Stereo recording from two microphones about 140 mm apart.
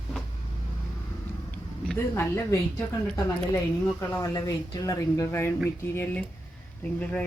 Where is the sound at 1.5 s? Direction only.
15° left (ahead or behind).